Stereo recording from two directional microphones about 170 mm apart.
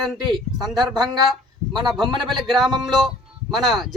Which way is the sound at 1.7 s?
25° right (ahead or behind).